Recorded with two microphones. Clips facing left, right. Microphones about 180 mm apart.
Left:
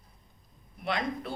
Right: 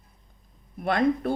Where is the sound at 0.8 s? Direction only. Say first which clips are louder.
Right 9 dB; 50° right (ahead or behind).